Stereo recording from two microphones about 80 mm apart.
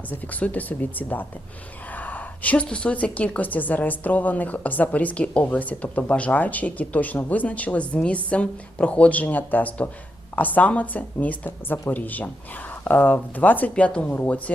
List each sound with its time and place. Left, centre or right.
0.1 s a woman's voice: centre